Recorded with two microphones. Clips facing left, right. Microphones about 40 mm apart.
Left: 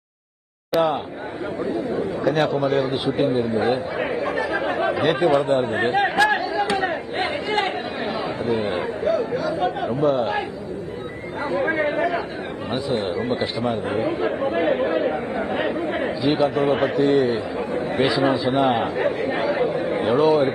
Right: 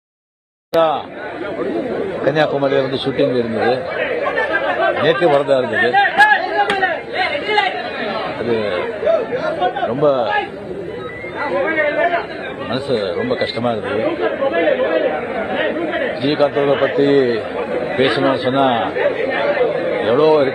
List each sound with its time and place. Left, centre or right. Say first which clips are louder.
0.7 s a man's voice: right 6 dB; centre
1.5 s chatter: right 4 dB; right
11.4 s speech: right 5 dB; right